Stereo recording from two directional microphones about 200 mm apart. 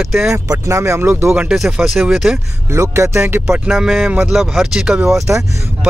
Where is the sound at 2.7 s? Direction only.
15° right (ahead or behind).